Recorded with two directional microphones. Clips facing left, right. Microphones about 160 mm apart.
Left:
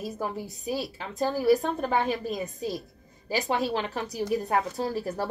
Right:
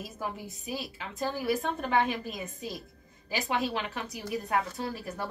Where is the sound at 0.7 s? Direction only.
35° left (ahead or behind).